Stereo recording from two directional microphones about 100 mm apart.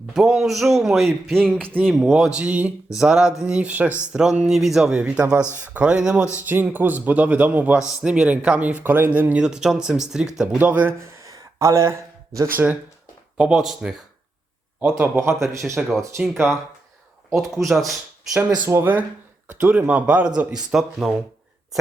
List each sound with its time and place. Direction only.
0.1 s a man's voice: 5° right (ahead or behind)
6.4 s speech: 20° right (ahead or behind)
11.2 s a sound: 30° right (ahead or behind)
13.3 s speech: 10° right (ahead or behind)
14.8 s speech: 15° right (ahead or behind)
15.8 s a man's voice: centre (ahead or behind)
17.3 s a man's voice: centre (ahead or behind)
18.7 s speech: 20° right (ahead or behind); by 21.2 s 5° right (ahead or behind)